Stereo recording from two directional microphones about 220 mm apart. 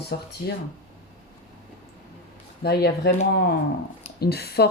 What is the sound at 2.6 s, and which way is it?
Speech, 45° left (ahead or behind).